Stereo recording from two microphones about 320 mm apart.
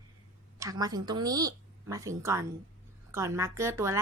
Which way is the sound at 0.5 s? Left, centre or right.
Centre.